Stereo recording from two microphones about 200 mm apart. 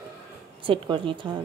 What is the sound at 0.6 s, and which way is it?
Speech, 25° right (ahead or behind).